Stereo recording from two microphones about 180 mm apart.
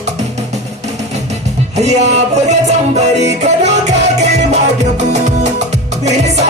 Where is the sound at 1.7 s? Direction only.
40° right (ahead or behind).